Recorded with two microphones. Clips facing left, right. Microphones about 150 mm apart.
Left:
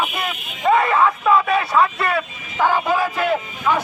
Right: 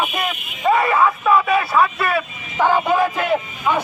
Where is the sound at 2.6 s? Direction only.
15° right (ahead or behind).